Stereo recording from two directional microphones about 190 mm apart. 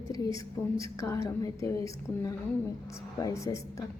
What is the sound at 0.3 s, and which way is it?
A woman's voice, 15° left (ahead or behind).